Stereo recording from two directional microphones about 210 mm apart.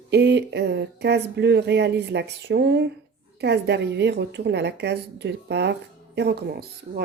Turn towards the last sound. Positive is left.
turn(degrees=-50)  # may be behind; listen again after turning